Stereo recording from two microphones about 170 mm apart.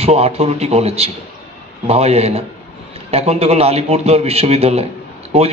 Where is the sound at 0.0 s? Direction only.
40° right (ahead or behind).